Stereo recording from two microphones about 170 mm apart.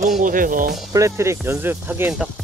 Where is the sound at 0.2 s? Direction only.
55° right (ahead or behind).